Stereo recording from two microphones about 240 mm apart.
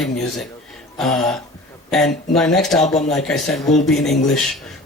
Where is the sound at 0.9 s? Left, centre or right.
Centre.